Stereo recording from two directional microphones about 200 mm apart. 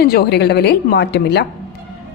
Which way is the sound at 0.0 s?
50° left (ahead or behind).